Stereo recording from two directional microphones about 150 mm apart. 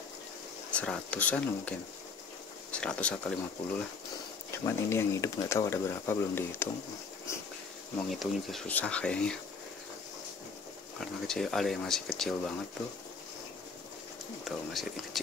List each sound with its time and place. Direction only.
0.7 s speech: 5° left (ahead or behind)
4.6 s speech: 20° left (ahead or behind)
8.1 s speech: centre (ahead or behind)
11.0 s speech: centre (ahead or behind)
14.4 s speech: centre (ahead or behind)